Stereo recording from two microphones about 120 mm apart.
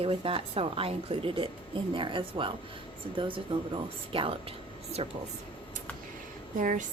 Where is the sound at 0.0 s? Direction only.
50° right (ahead or behind).